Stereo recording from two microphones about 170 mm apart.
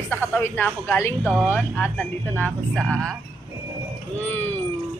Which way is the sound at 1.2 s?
5° right (ahead or behind).